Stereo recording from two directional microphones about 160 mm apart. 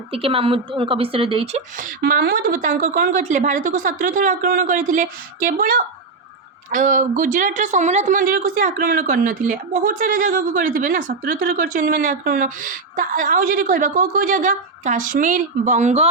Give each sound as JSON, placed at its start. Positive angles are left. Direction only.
{"t": 0.1, "sound": "a woman's voice", "side_deg": -35}
{"t": 1.7, "sound": "a woman's voice", "side_deg": -55}
{"t": 2.0, "sound": "a woman's voice", "side_deg": -80}